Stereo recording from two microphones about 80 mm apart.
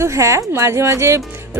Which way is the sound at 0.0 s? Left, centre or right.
Right.